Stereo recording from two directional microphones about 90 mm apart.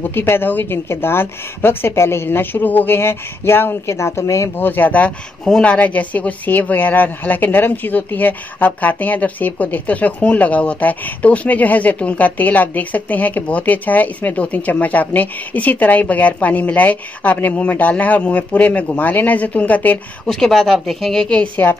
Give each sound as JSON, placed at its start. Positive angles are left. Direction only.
{"t": 0.1, "sound": "a woman's voice", "side_deg": 25}
{"t": 4.6, "sound": "speech", "side_deg": 20}
{"t": 20.2, "sound": "a woman's voice", "side_deg": 5}